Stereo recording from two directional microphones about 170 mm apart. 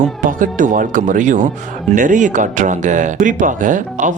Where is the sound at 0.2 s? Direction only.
55° right (ahead or behind).